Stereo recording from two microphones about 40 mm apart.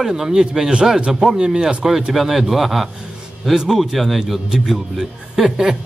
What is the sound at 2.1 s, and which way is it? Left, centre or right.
Speech, centre.